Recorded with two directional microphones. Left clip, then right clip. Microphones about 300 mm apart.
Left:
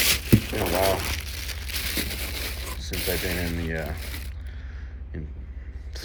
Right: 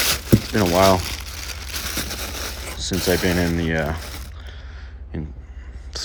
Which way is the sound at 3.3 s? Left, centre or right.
Right.